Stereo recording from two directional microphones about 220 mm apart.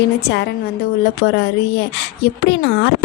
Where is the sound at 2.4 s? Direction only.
50° left (ahead or behind).